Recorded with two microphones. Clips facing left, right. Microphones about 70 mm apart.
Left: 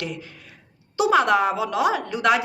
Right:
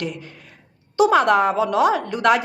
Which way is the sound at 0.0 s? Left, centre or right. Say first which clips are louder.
Right 3 dB; right.